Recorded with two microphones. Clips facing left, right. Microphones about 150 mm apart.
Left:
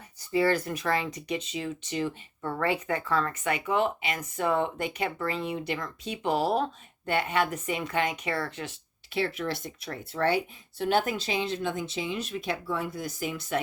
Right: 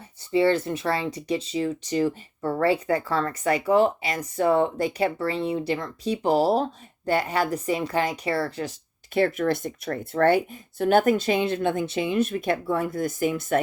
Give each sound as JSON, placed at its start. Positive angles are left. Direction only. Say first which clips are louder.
{"t": 0.3, "sound": "speech", "louder": "right 4 dB", "side_deg": -25}
{"t": 9.1, "sound": "speech", "louder": "right 8 dB", "side_deg": -50}